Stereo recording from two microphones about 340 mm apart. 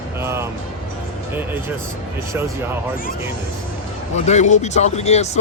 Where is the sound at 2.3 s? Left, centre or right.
Centre.